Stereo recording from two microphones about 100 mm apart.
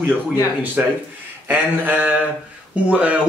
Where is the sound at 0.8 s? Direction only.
15° right (ahead or behind).